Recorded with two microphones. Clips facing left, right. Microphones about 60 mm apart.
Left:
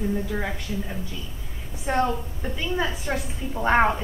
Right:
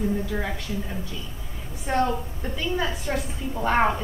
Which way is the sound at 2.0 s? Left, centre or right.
Centre.